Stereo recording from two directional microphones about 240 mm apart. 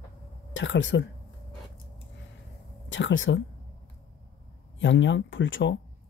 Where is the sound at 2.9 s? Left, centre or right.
Left.